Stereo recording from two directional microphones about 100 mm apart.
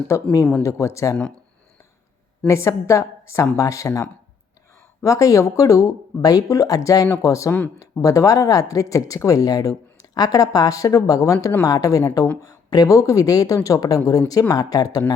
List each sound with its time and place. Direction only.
0.1 s speech: 35° left (ahead or behind)
2.5 s speech: 30° left (ahead or behind)
5.0 s speech: 35° left (ahead or behind)